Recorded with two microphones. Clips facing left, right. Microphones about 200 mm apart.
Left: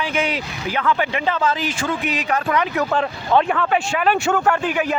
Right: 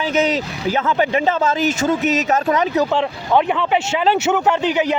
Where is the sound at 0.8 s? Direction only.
25° right (ahead or behind).